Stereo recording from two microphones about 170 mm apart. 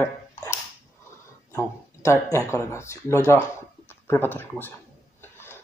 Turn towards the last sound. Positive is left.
turn(degrees=15)  # may be behind; listen again after turning